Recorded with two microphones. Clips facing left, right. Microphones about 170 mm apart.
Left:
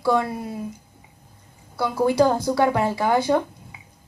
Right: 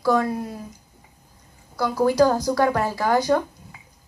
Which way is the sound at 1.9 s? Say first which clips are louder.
Right 1 dB; 25° left (ahead or behind).